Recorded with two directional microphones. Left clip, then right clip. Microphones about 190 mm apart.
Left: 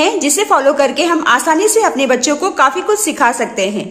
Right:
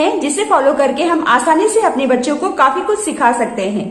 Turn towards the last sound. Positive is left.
turn(degrees=30)  # may be behind; listen again after turning